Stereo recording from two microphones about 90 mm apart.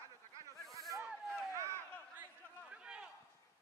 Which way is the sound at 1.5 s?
30° right (ahead or behind).